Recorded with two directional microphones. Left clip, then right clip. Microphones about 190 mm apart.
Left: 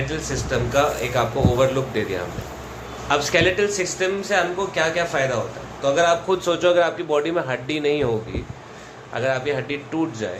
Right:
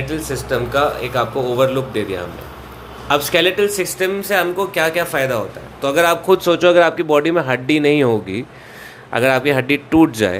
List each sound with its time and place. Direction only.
0.0 s a man's voice: 30° right (ahead or behind); by 10.3 s 50° right (ahead or behind)